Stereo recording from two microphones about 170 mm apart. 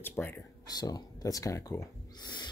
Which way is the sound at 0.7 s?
25° left (ahead or behind).